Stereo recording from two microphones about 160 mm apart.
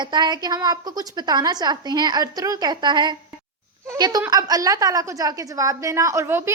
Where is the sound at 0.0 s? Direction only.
25° right (ahead or behind).